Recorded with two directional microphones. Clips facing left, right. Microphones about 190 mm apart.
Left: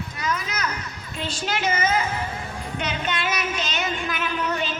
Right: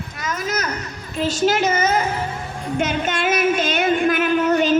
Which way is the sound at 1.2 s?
45° right (ahead or behind).